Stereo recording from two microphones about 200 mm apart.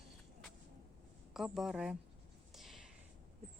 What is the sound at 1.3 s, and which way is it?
Speech, centre (ahead or behind).